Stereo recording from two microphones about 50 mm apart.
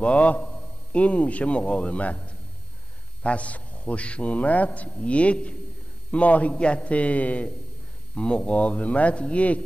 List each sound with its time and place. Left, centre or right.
0.0 s a man's voice: left